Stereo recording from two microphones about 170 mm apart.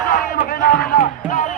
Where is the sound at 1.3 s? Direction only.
45° left (ahead or behind).